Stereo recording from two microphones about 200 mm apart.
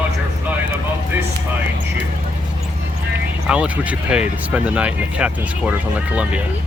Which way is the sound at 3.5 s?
5° right (ahead or behind).